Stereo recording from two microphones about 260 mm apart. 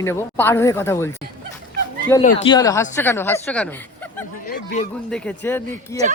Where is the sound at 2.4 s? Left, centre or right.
Centre.